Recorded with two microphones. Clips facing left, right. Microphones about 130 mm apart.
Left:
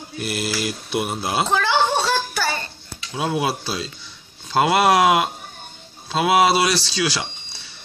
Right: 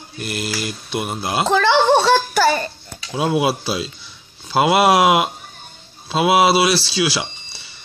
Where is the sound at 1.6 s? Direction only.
90° right.